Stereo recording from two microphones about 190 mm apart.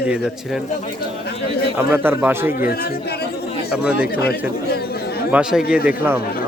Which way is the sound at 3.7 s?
5° right (ahead or behind).